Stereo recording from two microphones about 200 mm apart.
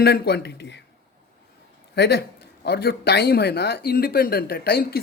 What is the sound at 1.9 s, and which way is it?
Speech, 55° left (ahead or behind).